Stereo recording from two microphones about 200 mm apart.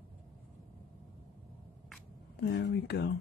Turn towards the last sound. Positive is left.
turn(degrees=55)  # may be behind; listen again after turning